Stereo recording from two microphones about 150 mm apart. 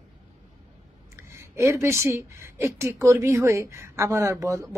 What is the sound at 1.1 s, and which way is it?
Speech, 20° right (ahead or behind).